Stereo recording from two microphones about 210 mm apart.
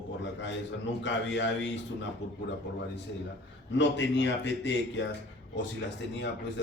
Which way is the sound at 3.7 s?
60° left (ahead or behind).